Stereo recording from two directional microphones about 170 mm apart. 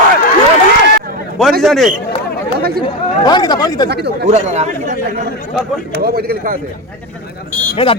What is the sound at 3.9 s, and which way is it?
Speech, 75° right (ahead or behind).